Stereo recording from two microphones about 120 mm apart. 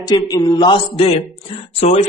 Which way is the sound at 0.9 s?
50° left (ahead or behind).